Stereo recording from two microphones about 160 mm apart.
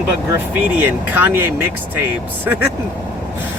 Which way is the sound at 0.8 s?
10° right (ahead or behind).